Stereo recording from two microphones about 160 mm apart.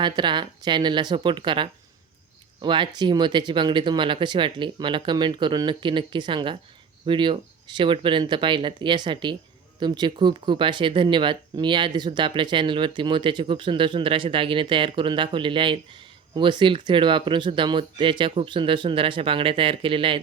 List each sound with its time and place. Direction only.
0.0 s speech: 30° right (ahead or behind)